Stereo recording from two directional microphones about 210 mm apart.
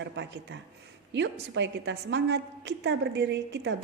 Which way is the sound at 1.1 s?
55° right (ahead or behind).